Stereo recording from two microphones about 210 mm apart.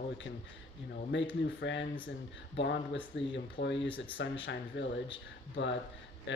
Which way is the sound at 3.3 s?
60° left (ahead or behind).